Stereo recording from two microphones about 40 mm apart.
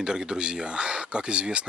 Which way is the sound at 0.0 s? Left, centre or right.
Centre.